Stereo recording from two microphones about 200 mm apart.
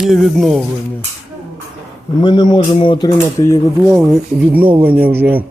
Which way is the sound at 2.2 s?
20° left (ahead or behind).